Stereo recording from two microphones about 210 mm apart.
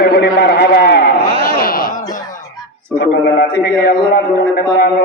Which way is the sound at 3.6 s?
45° left (ahead or behind).